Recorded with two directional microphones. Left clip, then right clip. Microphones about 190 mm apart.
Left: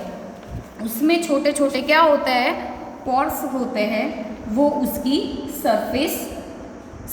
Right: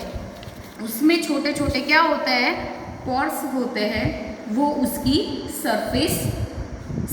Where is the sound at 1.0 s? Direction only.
50° left (ahead or behind).